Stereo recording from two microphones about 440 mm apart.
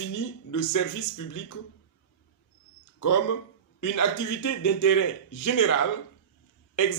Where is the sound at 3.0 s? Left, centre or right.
Left.